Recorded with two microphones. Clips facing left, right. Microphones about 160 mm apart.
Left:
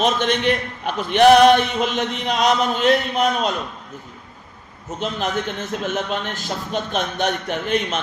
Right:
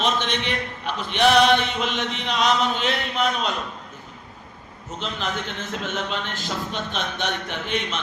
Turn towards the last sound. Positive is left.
turn(degrees=45)  # may be behind; listen again after turning